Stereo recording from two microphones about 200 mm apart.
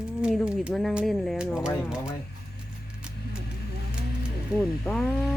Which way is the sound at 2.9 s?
5° right (ahead or behind).